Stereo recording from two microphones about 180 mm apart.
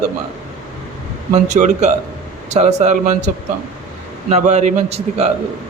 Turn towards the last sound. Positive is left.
turn(degrees=-35)  # may be behind; listen again after turning